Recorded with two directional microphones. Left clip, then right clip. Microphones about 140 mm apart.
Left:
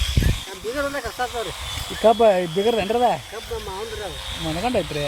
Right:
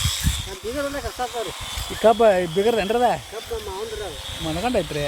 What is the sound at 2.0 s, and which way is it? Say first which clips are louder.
Speech: even; centre (ahead or behind).